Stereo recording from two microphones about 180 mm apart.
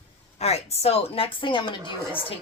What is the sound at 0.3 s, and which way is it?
Speech, 35° left (ahead or behind).